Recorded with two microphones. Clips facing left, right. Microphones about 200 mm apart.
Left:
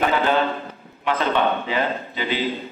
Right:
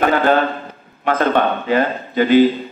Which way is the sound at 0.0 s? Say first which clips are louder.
Right 5 dB; 50° right (ahead or behind).